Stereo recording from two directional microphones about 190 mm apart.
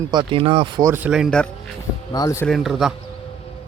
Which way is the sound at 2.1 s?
20° left (ahead or behind).